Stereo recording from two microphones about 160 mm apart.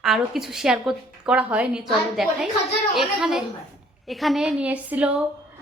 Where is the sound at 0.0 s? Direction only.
Centre (ahead or behind).